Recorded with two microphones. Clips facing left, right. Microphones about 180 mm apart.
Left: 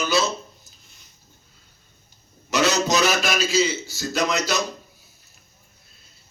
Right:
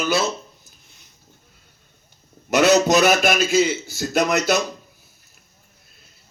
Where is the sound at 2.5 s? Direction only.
55° right (ahead or behind).